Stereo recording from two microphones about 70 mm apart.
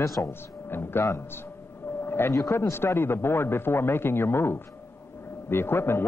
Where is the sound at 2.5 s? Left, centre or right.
Left.